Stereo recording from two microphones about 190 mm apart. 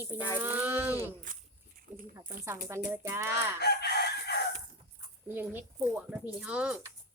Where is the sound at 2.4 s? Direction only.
15° right (ahead or behind).